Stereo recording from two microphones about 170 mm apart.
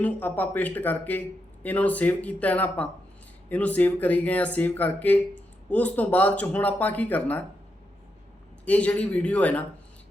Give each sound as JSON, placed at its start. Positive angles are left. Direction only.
{"t": 0.0, "sound": "speech", "side_deg": 10}
{"t": 8.6, "sound": "speech", "side_deg": 10}